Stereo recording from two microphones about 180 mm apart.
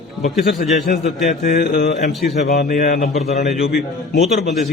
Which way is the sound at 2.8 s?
50° left (ahead or behind).